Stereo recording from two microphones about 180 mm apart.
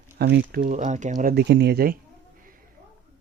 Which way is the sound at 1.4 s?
65° right (ahead or behind).